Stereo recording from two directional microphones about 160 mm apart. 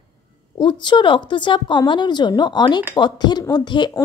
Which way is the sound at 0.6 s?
30° left (ahead or behind).